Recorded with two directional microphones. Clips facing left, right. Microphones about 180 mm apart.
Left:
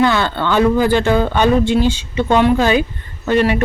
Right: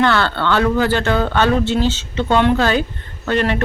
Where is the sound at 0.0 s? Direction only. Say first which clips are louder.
Left 1 dB; 15° left (ahead or behind).